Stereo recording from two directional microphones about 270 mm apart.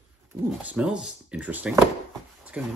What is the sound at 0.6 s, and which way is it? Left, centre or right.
Speech, centre.